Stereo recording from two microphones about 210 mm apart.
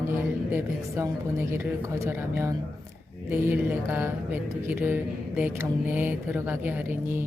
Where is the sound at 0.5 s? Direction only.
10° right (ahead or behind).